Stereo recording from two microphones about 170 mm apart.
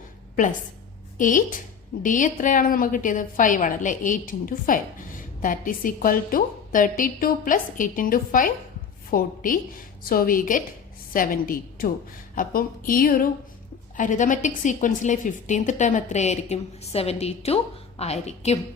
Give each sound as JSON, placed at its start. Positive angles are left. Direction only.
{"t": 1.2, "sound": "a woman's voice", "side_deg": 50}